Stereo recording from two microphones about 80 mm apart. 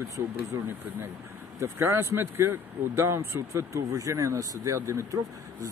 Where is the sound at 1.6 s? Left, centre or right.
Right.